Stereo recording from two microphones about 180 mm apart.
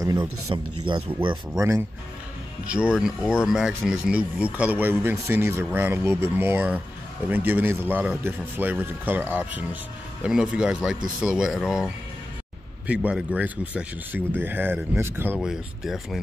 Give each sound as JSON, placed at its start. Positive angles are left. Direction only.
{"t": 0.0, "sound": "speech", "side_deg": -20}
{"t": 1.6, "sound": "speech", "side_deg": -15}
{"t": 15.3, "sound": "speech", "side_deg": 0}